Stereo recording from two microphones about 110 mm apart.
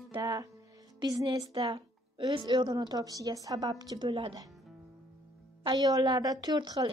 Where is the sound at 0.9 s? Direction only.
40° right (ahead or behind).